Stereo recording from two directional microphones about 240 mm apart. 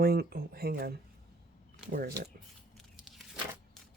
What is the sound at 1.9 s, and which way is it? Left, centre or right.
Speech, right.